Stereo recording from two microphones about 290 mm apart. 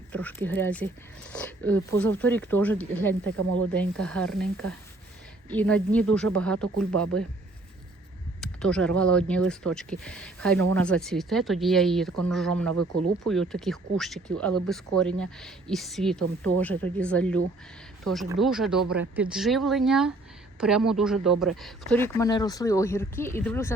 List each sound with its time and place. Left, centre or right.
0.1 s speech: centre
3.2 s speech: right
3.8 s speech: centre
5.5 s speech: centre
6.7 s speech: right
8.4 s a sound: centre
9.0 s speech: centre
12.7 s speech: right
13.2 s speech: centre